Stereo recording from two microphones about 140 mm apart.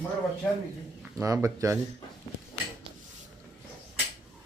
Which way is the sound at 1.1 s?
25° right (ahead or behind).